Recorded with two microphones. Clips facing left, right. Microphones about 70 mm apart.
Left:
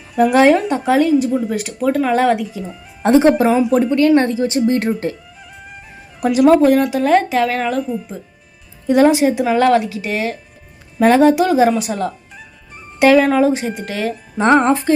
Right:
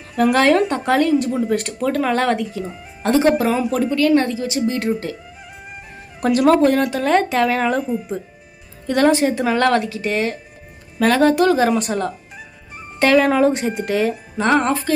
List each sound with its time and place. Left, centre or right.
0.2 s speech: centre
3.0 s music: left
3.7 s speech: left
6.1 s speech: centre
8.9 s speech: centre
11.7 s speech: centre
14.3 s music: left